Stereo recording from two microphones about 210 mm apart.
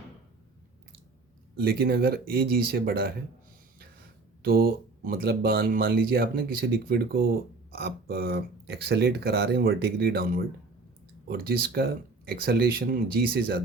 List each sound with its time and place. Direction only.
1.5 s speech: 50° right (ahead or behind)
4.4 s speech: 45° right (ahead or behind)